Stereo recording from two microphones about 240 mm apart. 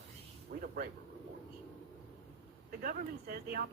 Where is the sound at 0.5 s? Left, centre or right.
Right.